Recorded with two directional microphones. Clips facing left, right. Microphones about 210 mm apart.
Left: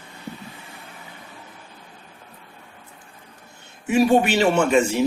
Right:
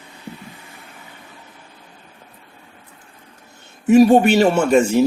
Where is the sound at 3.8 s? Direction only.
45° right (ahead or behind).